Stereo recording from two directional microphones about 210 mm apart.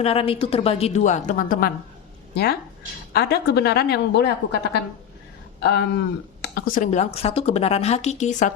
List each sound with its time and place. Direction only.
0.0 s a woman's voice: 30° left (ahead or behind); by 4.3 s 55° left (ahead or behind)
5.6 s speech: 50° left (ahead or behind); by 8.5 s 35° left (ahead or behind)